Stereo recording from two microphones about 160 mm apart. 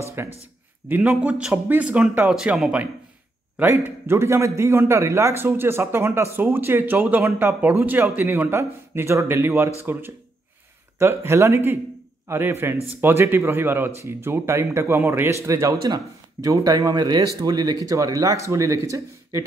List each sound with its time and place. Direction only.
0.2 s speech: 15° right (ahead or behind)